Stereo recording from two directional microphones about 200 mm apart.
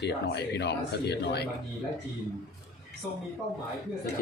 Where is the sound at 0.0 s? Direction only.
55° left (ahead or behind).